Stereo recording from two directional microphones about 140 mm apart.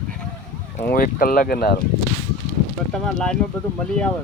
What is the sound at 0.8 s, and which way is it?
Speech, 90° left.